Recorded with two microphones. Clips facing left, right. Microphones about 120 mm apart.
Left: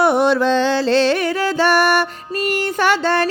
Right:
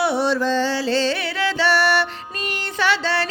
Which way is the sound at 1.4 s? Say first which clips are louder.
Left 1 dB; 45° left (ahead or behind).